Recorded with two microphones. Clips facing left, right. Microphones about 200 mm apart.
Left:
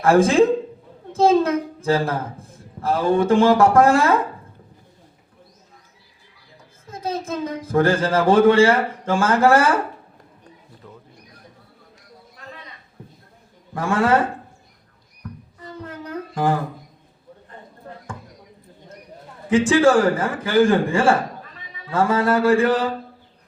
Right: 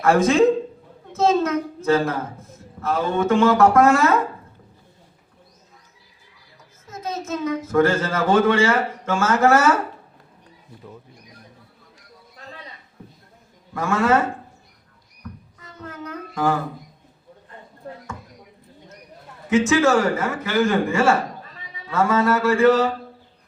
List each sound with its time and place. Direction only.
0.0 s a child's voice: 30° left (ahead or behind)
6.9 s a child's voice: 30° left (ahead or behind)
13.7 s a child's voice: 30° left (ahead or behind)
15.6 s humming: 30° left (ahead or behind)
19.5 s a child's voice: 30° left (ahead or behind)